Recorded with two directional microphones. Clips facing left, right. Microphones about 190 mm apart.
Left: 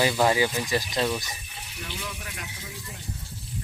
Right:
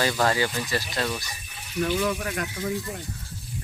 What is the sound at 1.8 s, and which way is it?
Speech, 65° right (ahead or behind).